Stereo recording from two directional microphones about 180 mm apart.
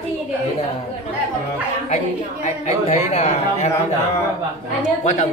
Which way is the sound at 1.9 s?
40° left (ahead or behind).